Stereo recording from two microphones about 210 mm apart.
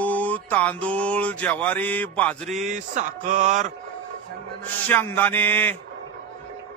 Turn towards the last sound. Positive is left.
turn(degrees=10)  # may be behind; listen again after turning